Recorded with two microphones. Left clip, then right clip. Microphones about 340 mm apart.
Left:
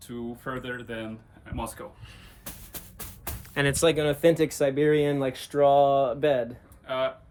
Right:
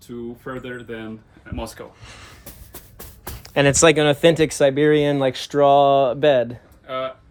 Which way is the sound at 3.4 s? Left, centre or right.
Centre.